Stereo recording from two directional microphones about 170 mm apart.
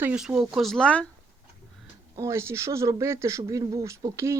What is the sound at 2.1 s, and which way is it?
Speech, 20° right (ahead or behind).